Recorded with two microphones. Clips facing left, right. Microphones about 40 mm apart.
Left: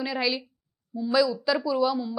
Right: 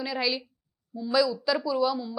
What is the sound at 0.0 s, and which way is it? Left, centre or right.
Speech, centre.